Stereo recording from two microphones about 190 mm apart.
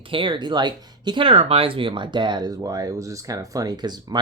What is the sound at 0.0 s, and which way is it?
Speech, 25° right (ahead or behind).